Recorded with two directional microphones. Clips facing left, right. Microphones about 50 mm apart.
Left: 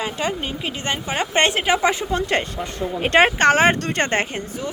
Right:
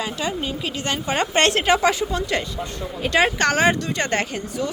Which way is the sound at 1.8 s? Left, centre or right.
Left.